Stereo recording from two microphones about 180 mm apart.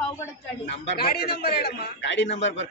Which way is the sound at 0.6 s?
65° left (ahead or behind).